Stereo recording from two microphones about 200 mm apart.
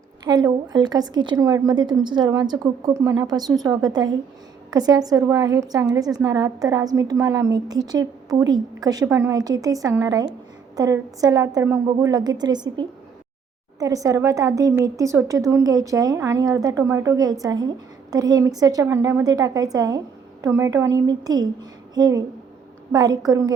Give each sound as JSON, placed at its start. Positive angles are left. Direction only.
{"t": 0.3, "sound": "a woman's voice", "side_deg": -20}
{"t": 13.7, "sound": "a woman's voice", "side_deg": -15}